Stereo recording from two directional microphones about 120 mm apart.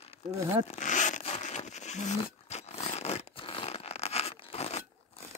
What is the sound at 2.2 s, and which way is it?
Zipper, 65° left (ahead or behind).